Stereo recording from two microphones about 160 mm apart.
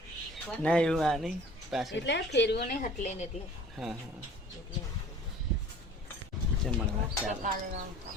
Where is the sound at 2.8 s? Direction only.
55° left (ahead or behind).